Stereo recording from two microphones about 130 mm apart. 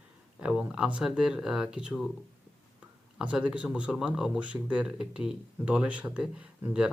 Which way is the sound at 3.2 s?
5° right (ahead or behind).